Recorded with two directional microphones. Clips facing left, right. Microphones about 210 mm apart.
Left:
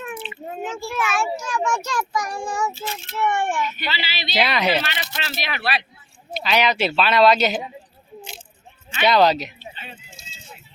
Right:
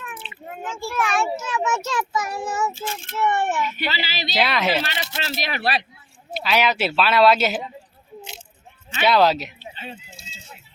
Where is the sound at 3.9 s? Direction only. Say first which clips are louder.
Right 2 dB; 45° right (ahead or behind).